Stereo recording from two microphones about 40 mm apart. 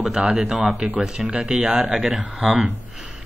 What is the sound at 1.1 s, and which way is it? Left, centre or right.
Speech, centre.